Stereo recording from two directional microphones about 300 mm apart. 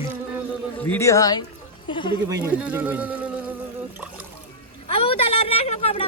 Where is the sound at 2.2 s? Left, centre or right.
Centre.